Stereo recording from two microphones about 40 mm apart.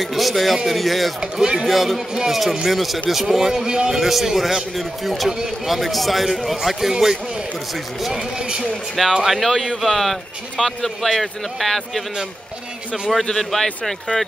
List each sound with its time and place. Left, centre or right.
0.0 s a man's voice: centre
1.2 s a man's voice: centre
3.5 s a man's voice: centre
4.0 s a man's voice: centre
8.9 s a man's voice: centre
13.2 s a man's voice: centre